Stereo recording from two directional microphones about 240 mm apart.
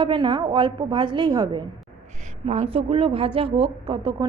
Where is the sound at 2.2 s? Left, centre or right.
Right.